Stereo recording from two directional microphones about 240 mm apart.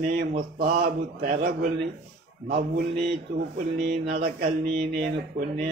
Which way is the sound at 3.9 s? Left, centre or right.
Right.